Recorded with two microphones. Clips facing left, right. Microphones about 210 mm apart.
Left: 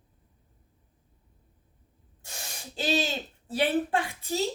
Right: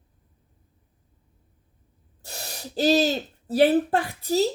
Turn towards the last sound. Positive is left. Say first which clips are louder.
# right 6 dB
turn(degrees=-40)  # may be behind; listen again after turning